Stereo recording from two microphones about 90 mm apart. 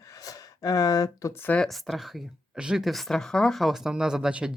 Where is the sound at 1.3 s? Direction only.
25° left (ahead or behind).